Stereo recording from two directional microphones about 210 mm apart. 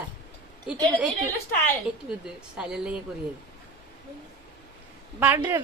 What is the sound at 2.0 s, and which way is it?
Speech, 5° right (ahead or behind).